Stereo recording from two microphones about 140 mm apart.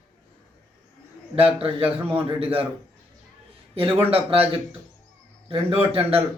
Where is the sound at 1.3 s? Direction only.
45° right (ahead or behind).